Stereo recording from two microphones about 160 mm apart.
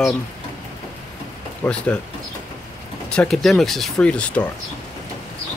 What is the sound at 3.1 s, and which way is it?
Speech, 5° left (ahead or behind).